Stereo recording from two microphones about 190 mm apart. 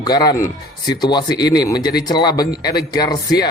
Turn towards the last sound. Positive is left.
turn(degrees=20)  # may be behind; listen again after turning